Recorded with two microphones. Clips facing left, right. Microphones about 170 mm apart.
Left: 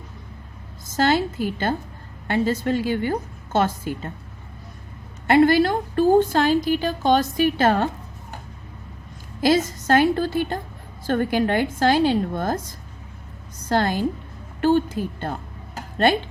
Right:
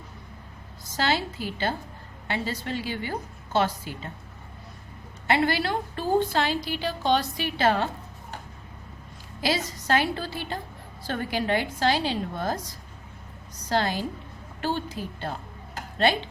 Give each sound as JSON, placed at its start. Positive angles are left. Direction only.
{"t": 0.9, "sound": "a woman's voice", "side_deg": 50}
{"t": 5.3, "sound": "a woman's voice", "side_deg": 45}
{"t": 9.4, "sound": "a woman's voice", "side_deg": 45}
{"t": 13.7, "sound": "a woman's voice", "side_deg": 50}